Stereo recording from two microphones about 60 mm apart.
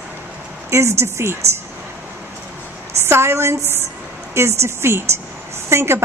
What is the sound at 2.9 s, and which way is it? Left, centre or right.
Speech, right.